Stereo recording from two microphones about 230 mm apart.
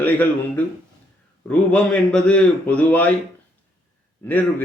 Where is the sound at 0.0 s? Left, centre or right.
Centre.